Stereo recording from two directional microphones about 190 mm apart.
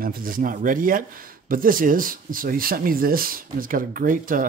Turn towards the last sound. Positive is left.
turn(degrees=-45)  # may be behind; listen again after turning